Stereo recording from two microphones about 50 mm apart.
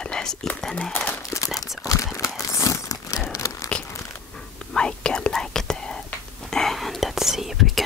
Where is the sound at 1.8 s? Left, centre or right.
Left.